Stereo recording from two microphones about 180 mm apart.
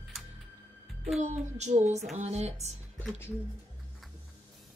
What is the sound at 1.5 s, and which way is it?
Speech, 40° right (ahead or behind).